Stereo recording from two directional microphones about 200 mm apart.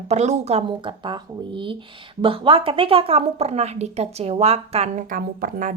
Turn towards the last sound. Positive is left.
turn(degrees=-45)  # may be behind; listen again after turning